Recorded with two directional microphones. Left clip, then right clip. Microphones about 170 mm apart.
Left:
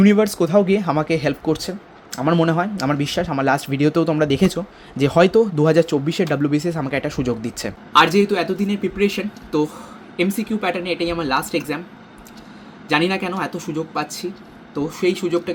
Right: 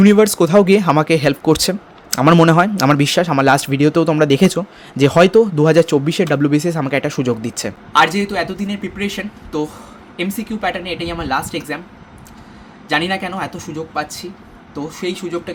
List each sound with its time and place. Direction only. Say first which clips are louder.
0.0 s speech: right 5 dB; 20° right (ahead or behind)
1.5 s speech: right 10 dB; 35° right (ahead or behind); by 11.8 s centre (ahead or behind)
12.9 s speech: right 1 dB; centre (ahead or behind)